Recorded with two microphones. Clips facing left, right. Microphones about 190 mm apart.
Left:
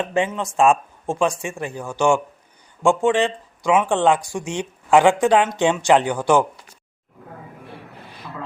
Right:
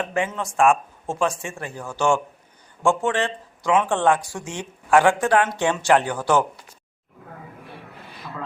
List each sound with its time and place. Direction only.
0.0 s speech: 20° left (ahead or behind)